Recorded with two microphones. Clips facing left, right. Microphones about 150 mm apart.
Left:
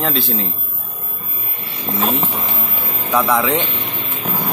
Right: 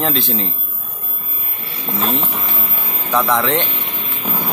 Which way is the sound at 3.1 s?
10° left (ahead or behind).